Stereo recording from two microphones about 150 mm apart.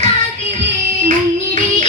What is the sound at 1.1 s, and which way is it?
Music, 55° right (ahead or behind).